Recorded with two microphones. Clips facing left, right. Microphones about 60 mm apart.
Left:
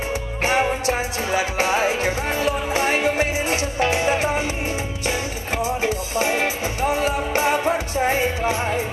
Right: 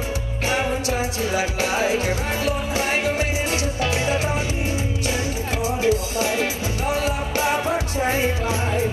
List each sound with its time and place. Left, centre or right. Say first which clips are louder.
0.4 s music: left 3 dB; left
5.6 s music: right 2 dB; left